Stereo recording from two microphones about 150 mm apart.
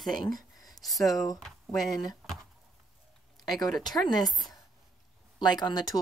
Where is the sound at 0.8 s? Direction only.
Centre (ahead or behind).